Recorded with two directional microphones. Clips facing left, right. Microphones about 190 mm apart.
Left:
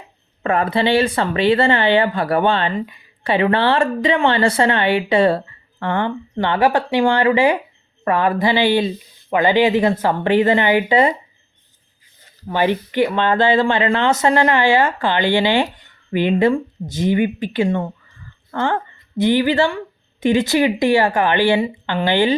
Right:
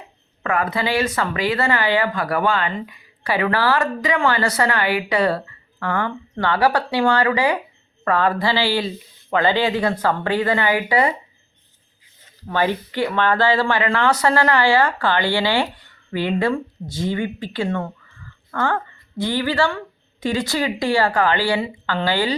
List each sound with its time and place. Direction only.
0.4 s speech: 30° left (ahead or behind)
12.5 s speech: 15° left (ahead or behind)